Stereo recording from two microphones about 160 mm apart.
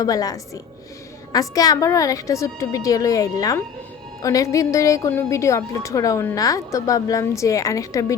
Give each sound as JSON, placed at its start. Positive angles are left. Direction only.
{"t": 0.0, "sound": "a woman's voice", "side_deg": 20}